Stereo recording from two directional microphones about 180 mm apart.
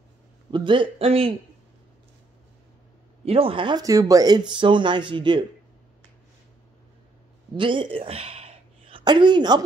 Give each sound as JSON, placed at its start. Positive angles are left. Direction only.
{"t": 0.5, "sound": "speech", "side_deg": -25}
{"t": 3.3, "sound": "speech", "side_deg": -30}
{"t": 7.5, "sound": "speech", "side_deg": -25}